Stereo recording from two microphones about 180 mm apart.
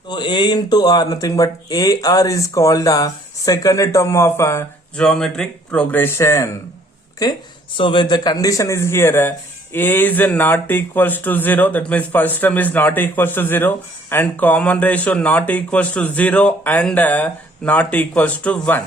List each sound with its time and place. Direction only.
0.1 s speech: 25° left (ahead or behind)
7.8 s speech: 25° left (ahead or behind); by 18.8 s 5° left (ahead or behind)